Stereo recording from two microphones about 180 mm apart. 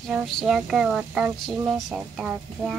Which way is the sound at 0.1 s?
5° right (ahead or behind).